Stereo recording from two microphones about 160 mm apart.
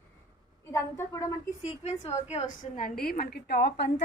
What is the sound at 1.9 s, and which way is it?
A woman's voice, 45° left (ahead or behind).